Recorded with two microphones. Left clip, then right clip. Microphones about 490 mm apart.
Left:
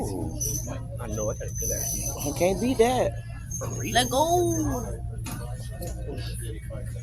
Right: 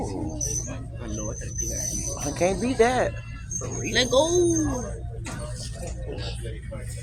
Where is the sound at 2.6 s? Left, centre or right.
Left.